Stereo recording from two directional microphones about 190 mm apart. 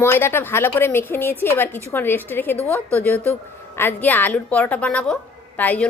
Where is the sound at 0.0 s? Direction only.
15° left (ahead or behind).